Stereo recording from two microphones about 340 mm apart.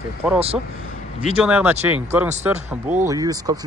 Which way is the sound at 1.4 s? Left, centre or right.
Centre.